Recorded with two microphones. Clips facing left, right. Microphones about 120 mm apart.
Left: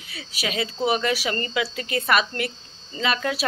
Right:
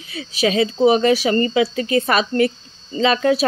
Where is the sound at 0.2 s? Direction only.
25° right (ahead or behind).